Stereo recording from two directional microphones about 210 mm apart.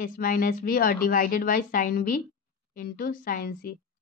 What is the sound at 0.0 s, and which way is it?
A woman's voice, 40° left (ahead or behind).